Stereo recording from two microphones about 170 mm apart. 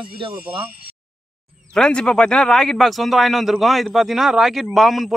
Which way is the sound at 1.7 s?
5° left (ahead or behind).